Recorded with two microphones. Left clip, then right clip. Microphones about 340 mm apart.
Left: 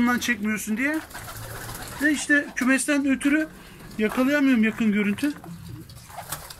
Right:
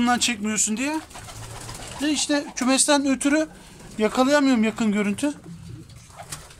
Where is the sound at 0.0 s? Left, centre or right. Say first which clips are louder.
Right 2 dB; centre.